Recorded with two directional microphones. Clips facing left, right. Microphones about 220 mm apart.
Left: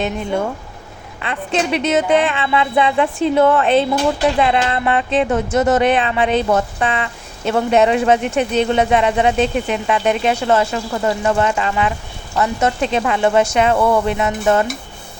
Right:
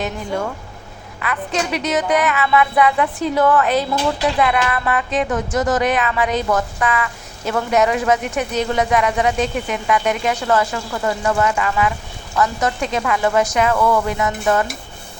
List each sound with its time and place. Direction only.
1.2 s speech: 25° left (ahead or behind)